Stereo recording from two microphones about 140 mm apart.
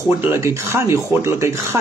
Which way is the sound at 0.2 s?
20° right (ahead or behind).